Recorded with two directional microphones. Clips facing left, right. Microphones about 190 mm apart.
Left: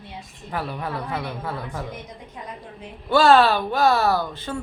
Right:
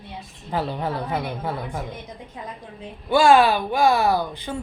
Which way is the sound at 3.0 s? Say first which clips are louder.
Even; 15° right (ahead or behind).